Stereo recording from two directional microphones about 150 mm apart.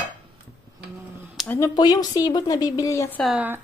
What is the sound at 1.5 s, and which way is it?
Speech, 20° left (ahead or behind).